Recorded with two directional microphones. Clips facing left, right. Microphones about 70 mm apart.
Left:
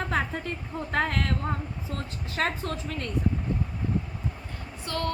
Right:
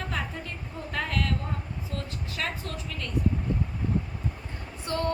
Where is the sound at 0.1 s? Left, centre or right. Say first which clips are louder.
Left 5 dB; left.